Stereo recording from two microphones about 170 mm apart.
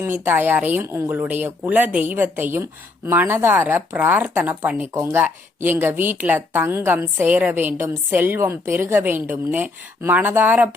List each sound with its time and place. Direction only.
0.0 s speech: 10° right (ahead or behind)